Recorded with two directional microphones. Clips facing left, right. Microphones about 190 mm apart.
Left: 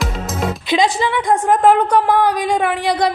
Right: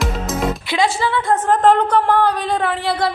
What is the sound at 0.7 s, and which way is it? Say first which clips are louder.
A woman's voice: left 4 dB; 15° left (ahead or behind).